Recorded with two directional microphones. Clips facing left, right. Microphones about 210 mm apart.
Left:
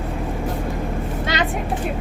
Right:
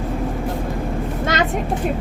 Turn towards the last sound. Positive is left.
turn(degrees=-45)  # may be behind; listen again after turning